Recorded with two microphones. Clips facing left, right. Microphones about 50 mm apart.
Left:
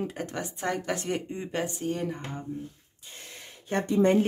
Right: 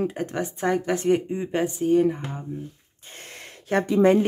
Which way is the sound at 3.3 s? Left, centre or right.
Right.